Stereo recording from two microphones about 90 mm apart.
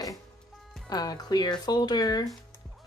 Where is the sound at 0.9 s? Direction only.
45° left (ahead or behind).